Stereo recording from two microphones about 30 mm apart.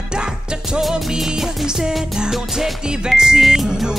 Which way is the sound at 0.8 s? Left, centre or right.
Centre.